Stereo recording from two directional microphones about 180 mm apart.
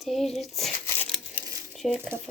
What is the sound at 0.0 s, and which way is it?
Speech, centre (ahead or behind).